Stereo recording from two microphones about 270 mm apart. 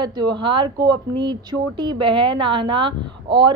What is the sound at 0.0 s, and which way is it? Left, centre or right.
Speech, centre.